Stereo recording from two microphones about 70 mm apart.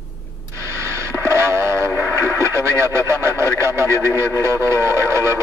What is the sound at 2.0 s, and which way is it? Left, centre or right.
Speech, right.